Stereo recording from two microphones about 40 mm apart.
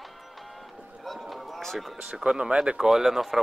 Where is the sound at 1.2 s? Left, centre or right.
Centre.